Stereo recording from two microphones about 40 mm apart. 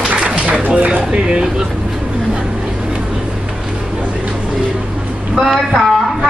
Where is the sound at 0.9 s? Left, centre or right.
Right.